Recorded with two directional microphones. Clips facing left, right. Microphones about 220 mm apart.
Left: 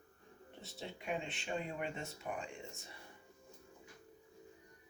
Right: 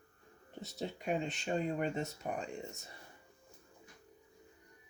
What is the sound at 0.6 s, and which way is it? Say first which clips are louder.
Speech: right 6 dB; 40° right (ahead or behind).